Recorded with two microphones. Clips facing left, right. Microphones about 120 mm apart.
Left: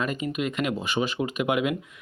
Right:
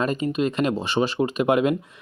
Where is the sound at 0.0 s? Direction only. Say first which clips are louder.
Right 5 dB; 35° right (ahead or behind).